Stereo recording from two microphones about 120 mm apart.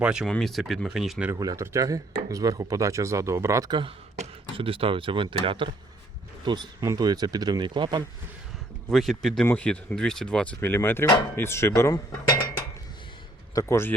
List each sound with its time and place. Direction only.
0.0 s speech: 5° right (ahead or behind)
0.3 s speech: 5° left (ahead or behind)
1.4 s speech: 25° right (ahead or behind)
3.7 s speech: 40° right (ahead or behind)
8.9 s speech: centre (ahead or behind); by 11.9 s 20° left (ahead or behind)
13.5 s speech: 25° left (ahead or behind)